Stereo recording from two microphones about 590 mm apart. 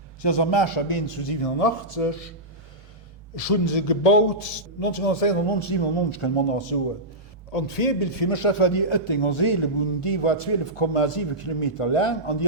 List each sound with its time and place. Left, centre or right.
0.2 s a man's voice: left
3.3 s a man's voice: left
7.5 s a man's voice: left